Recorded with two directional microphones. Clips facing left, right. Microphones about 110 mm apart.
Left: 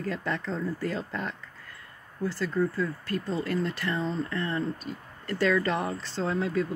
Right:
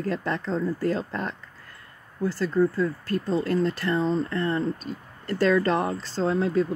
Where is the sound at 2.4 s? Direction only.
30° right (ahead or behind).